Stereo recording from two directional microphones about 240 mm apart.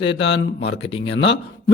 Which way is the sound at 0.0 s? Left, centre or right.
Left.